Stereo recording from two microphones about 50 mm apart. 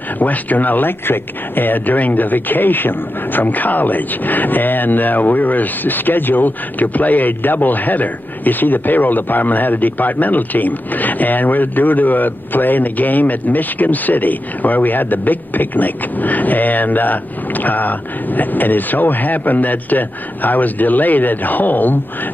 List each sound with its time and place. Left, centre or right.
0.2 s speech: left